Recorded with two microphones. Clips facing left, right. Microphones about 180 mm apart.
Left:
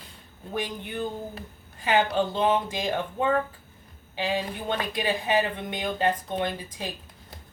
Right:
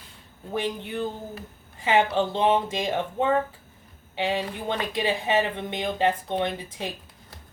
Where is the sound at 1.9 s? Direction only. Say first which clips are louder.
Right 1 dB; 25° right (ahead or behind).